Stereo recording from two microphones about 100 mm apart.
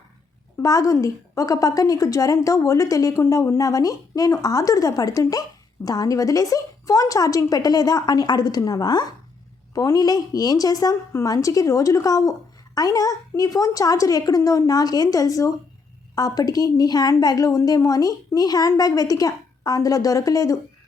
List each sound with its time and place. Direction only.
0.6 s a woman's voice: 35° left (ahead or behind)